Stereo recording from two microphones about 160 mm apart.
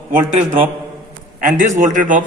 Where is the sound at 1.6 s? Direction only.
50° right (ahead or behind).